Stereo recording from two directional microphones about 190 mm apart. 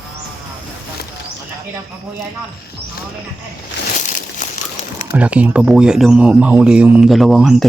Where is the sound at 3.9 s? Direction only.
40° left (ahead or behind).